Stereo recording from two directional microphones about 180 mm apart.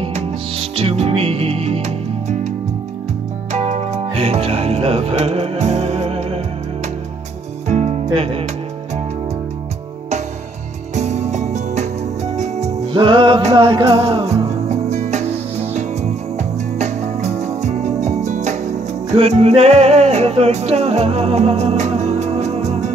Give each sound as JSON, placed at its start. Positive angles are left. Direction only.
{"t": 0.0, "sound": "music", "side_deg": -35}
{"t": 3.5, "sound": "music", "side_deg": -40}
{"t": 7.6, "sound": "music", "side_deg": -40}
{"t": 11.0, "sound": "music", "side_deg": -40}